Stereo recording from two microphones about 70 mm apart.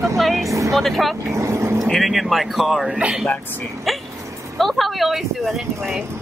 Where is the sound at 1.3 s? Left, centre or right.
Right.